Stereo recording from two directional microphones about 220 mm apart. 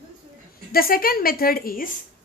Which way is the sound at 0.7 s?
40° left (ahead or behind).